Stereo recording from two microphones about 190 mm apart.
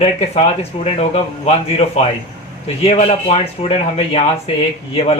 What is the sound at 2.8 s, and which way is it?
Speech, 30° left (ahead or behind).